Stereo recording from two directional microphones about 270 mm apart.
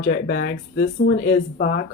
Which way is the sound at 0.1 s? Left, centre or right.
Left.